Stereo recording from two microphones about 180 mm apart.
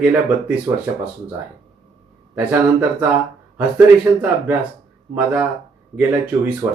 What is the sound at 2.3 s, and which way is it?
Speech, 10° right (ahead or behind).